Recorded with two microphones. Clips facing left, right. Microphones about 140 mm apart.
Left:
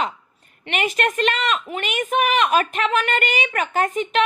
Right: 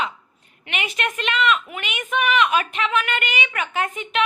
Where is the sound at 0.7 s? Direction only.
45° left (ahead or behind).